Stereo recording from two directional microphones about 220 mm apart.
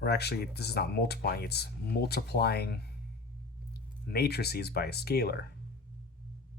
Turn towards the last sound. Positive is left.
turn(degrees=45)  # may be behind; listen again after turning